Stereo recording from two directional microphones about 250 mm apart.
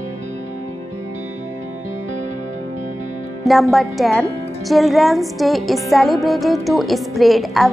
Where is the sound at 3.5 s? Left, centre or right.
Centre.